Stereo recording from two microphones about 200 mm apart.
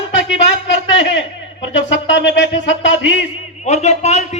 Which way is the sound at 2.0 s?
65° left (ahead or behind).